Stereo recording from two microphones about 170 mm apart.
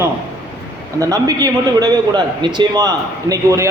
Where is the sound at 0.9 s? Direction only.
20° right (ahead or behind).